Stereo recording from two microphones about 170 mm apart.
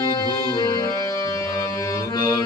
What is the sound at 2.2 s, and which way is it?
Music, 20° left (ahead or behind).